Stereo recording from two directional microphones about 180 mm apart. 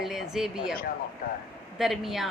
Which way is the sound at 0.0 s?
Centre (ahead or behind).